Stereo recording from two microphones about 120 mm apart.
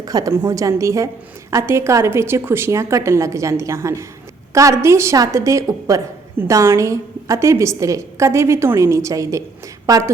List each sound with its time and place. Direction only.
0.0 s a woman's voice: 30° right (ahead or behind)